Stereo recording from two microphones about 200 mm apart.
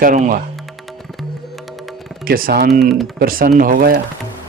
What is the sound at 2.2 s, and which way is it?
Speech, 45° right (ahead or behind).